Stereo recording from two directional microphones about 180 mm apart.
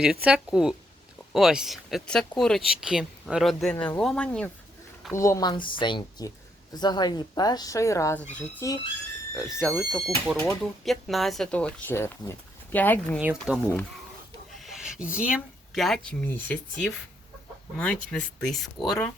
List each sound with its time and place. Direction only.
0.3 s speech: 5° right (ahead or behind)
5.1 s speech: 15° left (ahead or behind)
8.6 s speech: 20° left (ahead or behind)
9.3 s speech: 5° right (ahead or behind)
13.1 s speech: 5° right (ahead or behind)
14.5 s a sound: centre (ahead or behind)
15.7 s speech: centre (ahead or behind)
17.7 s speech: 5° left (ahead or behind)